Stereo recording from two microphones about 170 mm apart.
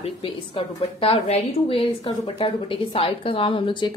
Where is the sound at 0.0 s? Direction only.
30° left (ahead or behind).